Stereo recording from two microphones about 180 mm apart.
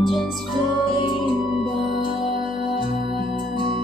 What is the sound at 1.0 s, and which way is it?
Music, 25° left (ahead or behind).